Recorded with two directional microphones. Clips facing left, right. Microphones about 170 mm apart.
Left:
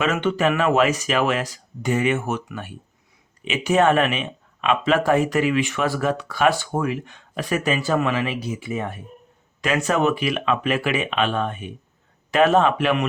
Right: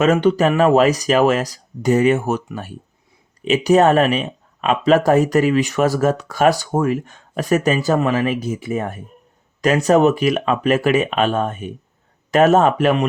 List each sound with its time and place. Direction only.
0.0 s speech: 40° right (ahead or behind)